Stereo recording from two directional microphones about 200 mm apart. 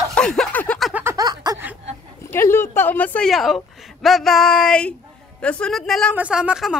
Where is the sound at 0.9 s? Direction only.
10° right (ahead or behind).